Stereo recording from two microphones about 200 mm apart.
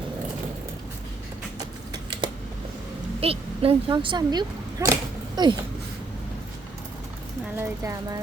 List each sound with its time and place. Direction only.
1.9 s typing: 25° right (ahead or behind)
3.2 s speech: 30° right (ahead or behind)
5.4 s a sound: 20° right (ahead or behind)
7.5 s speech: 15° right (ahead or behind)